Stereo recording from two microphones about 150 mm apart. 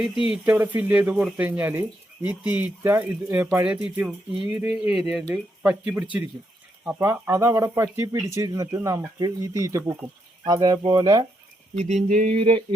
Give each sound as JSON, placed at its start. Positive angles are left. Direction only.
{"t": 0.0, "sound": "speech", "side_deg": -5}
{"t": 11.8, "sound": "a sound", "side_deg": -50}
{"t": 12.4, "sound": "mantra", "side_deg": -40}